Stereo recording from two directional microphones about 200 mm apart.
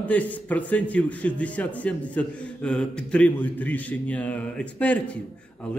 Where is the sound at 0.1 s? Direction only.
10° left (ahead or behind).